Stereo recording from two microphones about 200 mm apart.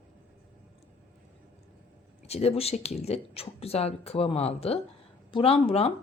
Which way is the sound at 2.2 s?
30° left (ahead or behind).